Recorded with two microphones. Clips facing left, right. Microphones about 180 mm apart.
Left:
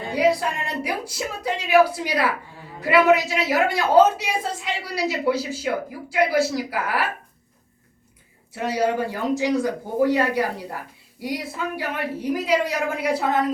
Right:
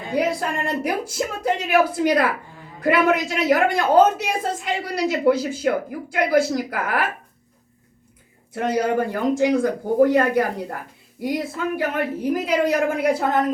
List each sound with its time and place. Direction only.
0.1 s speech: 50° right (ahead or behind)
8.5 s speech: 50° right (ahead or behind)